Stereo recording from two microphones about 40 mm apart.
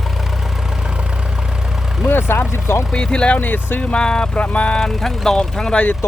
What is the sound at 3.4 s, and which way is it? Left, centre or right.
Speech, left.